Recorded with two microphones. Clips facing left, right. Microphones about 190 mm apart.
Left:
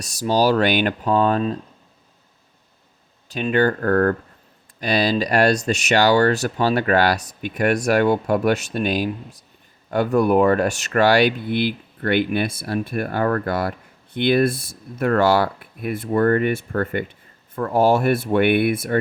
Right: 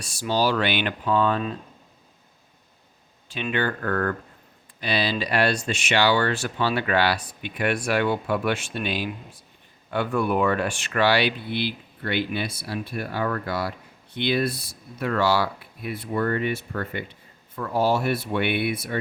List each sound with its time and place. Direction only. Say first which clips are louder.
0.0 s speech: left 5 dB; 40° left (ahead or behind)
3.2 s speech: left 7 dB; 40° left (ahead or behind)